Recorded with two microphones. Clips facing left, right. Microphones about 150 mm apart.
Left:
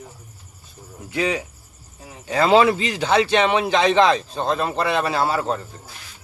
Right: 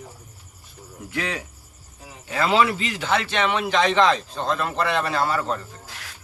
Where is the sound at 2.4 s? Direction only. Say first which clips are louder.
Left 5 dB; 25° left (ahead or behind).